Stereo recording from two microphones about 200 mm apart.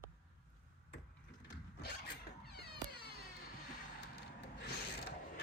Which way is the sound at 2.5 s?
55° left (ahead or behind).